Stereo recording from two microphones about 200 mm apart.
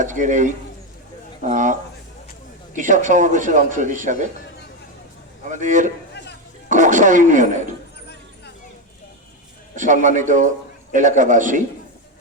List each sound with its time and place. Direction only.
0.0 s a man's voice: 40° right (ahead or behind)
5.5 s a man's voice: 40° right (ahead or behind)
9.7 s a man's voice: 40° right (ahead or behind)